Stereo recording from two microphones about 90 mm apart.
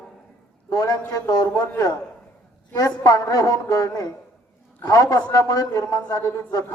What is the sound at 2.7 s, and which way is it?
A man's voice, 40° left (ahead or behind).